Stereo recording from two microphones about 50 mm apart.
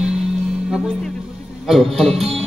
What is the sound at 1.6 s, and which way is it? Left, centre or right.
Speech, centre.